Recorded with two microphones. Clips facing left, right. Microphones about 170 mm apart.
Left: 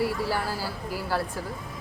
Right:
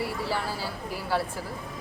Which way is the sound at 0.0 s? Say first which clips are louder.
Left 3 dB; centre (ahead or behind).